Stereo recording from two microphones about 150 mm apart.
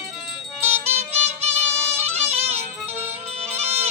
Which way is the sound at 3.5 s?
15° right (ahead or behind).